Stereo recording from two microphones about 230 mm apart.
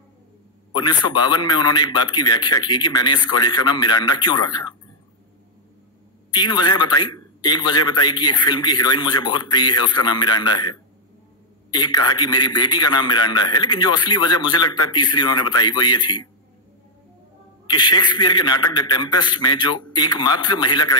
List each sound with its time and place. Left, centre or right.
0.7 s a man's voice: centre
6.3 s a man's voice: centre
11.7 s a man's voice: centre
17.6 s a man's voice: centre